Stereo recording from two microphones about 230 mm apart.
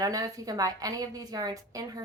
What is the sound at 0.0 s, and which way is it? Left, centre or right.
A woman's voice, centre.